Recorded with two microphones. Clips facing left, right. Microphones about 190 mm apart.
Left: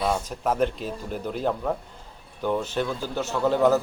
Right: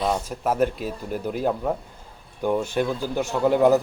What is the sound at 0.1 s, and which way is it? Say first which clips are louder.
A man's voice: right 1 dB; 10° right (ahead or behind).